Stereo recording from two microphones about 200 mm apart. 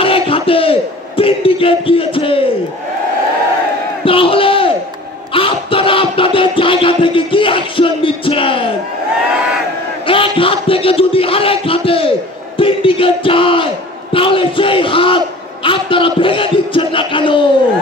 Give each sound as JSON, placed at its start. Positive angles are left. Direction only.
{"t": 0.0, "sound": "battle cry", "side_deg": 25}
{"t": 4.0, "sound": "crowd", "side_deg": 25}
{"t": 5.3, "sound": "a sound", "side_deg": 25}
{"t": 10.0, "sound": "a sound", "side_deg": 25}
{"t": 12.5, "sound": "battle cry", "side_deg": 25}
{"t": 14.1, "sound": "crowd", "side_deg": 25}